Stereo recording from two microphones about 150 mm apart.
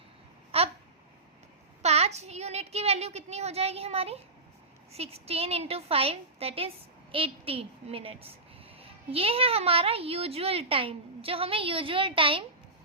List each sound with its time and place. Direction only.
0.5 s babbling: 40° right (ahead or behind)
1.8 s a woman's voice: 45° right (ahead or behind)